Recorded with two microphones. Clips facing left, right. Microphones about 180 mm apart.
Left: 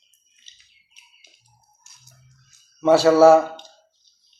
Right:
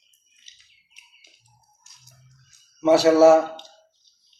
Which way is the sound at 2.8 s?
20° right (ahead or behind).